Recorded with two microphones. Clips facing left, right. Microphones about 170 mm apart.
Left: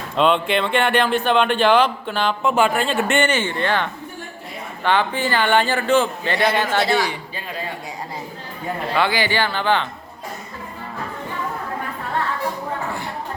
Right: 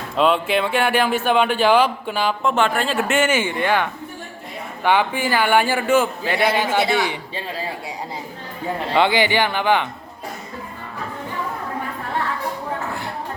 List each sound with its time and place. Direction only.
0.2 s a man's voice: 5° right (ahead or behind)
2.4 s a man's voice: 5° left (ahead or behind); by 7.6 s 25° right (ahead or behind)
9.0 s a man's voice: 20° right (ahead or behind)